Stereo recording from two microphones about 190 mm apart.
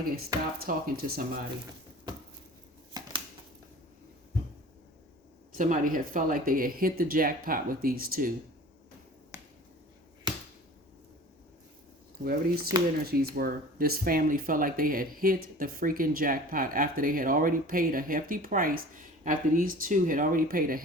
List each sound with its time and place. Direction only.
0.6 s speech: 50° right (ahead or behind)
5.5 s speech: 45° right (ahead or behind)
9.3 s finger snapping: 15° right (ahead or behind)
12.2 s speech: 50° right (ahead or behind)